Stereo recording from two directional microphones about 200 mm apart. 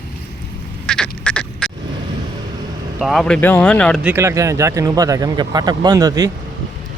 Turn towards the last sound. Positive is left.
turn(degrees=-20)  # may be behind; listen again after turning